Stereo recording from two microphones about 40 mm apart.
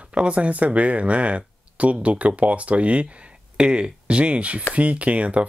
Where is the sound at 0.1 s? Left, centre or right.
Right.